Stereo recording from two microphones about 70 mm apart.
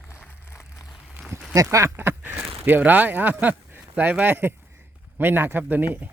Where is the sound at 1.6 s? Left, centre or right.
Right.